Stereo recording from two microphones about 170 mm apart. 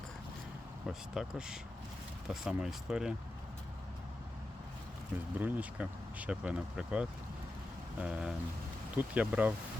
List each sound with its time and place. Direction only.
0.9 s speech: 5° right (ahead or behind)
5.4 s speech: 10° right (ahead or behind)